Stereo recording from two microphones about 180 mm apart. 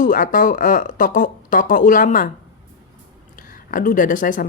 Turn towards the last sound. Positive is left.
turn(degrees=50)  # may be behind; listen again after turning